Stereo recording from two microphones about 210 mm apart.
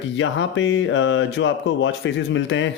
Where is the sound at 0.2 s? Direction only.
60° left (ahead or behind).